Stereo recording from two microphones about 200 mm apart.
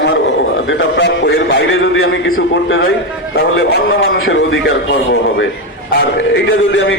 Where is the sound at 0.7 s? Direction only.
60° left (ahead or behind).